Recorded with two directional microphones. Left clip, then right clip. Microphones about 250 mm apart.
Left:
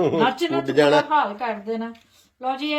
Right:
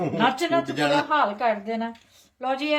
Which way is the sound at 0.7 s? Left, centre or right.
Centre.